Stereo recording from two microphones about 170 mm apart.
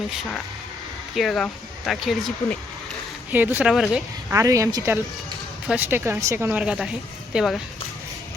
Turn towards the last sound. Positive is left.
turn(degrees=-5)  # may be behind; listen again after turning